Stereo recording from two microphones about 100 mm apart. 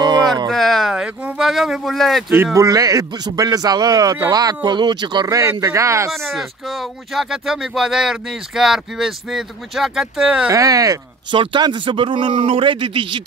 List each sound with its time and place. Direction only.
0.0 s a sound: 45° right (ahead or behind)
0.5 s a sound: 5° left (ahead or behind)
2.3 s a man's voice: 25° right (ahead or behind)
6.1 s speech: centre (ahead or behind)
10.5 s a man's voice: 35° right (ahead or behind)
11.3 s a man's voice: 50° right (ahead or behind)